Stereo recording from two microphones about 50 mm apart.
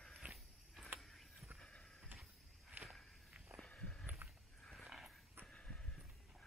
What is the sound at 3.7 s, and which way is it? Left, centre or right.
Walk, left.